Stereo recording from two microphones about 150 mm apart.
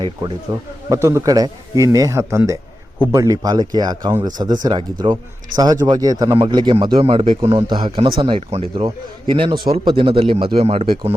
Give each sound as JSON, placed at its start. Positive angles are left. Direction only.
{"t": 0.9, "sound": "a man's voice", "side_deg": -20}
{"t": 8.4, "sound": "speech", "side_deg": -45}